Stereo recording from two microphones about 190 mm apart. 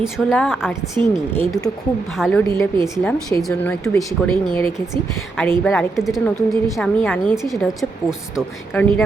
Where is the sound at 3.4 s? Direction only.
Centre (ahead or behind).